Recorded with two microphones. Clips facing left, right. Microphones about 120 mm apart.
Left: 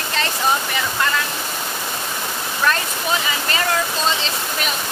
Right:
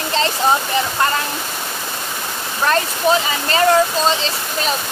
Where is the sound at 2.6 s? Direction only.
35° right (ahead or behind).